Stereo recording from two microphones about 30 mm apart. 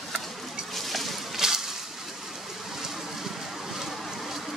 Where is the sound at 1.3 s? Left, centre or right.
Centre.